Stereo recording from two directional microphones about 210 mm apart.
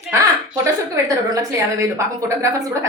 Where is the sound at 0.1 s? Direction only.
15° right (ahead or behind).